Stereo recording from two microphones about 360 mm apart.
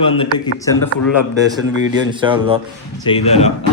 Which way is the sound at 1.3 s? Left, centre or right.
Centre.